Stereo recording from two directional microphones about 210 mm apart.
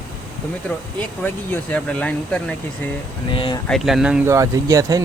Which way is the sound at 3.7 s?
Centre (ahead or behind).